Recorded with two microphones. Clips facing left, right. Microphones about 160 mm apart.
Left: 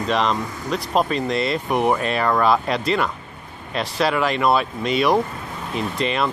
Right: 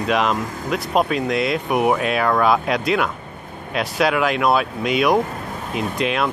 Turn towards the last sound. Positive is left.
turn(degrees=0)  # may be behind; listen again after turning